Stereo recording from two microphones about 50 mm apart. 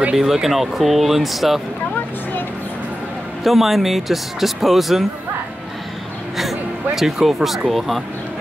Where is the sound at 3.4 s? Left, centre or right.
Centre.